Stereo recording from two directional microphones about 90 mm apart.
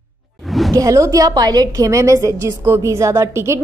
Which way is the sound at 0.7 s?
40° right (ahead or behind).